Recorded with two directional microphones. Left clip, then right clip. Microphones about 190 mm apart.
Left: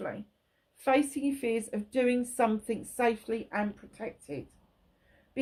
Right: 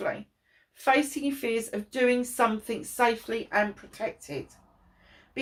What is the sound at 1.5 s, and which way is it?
A woman's voice, 50° left (ahead or behind).